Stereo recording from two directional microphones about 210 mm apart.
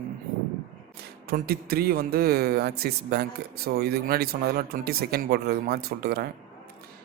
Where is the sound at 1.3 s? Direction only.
45° right (ahead or behind).